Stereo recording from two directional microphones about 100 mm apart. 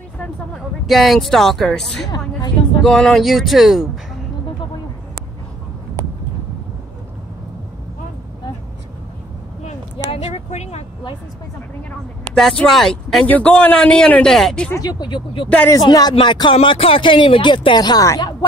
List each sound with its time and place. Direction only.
0.8 s speech: centre (ahead or behind)
2.0 s a woman's voice: 45° left (ahead or behind)
2.8 s speech: 5° left (ahead or behind)
10.1 s a sound: 85° left
12.4 s speech: 5° left (ahead or behind)
14.8 s speech: 45° left (ahead or behind)
16.5 s speech: 65° left (ahead or behind); by 18.3 s 35° left (ahead or behind)